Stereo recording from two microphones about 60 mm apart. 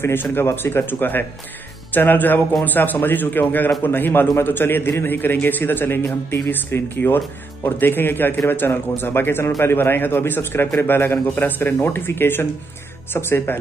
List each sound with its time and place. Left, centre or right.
0.0 s a man's voice: left